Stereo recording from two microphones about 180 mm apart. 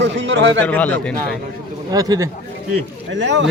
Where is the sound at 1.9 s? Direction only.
20° right (ahead or behind).